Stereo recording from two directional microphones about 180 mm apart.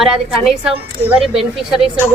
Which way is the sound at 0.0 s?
5° right (ahead or behind).